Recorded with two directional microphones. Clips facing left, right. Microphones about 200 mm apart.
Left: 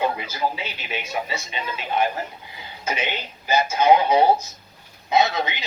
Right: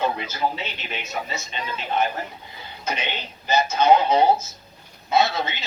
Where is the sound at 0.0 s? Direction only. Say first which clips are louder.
Even; 10° left (ahead or behind).